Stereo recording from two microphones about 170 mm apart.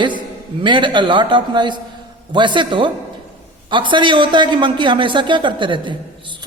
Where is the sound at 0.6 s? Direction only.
30° right (ahead or behind).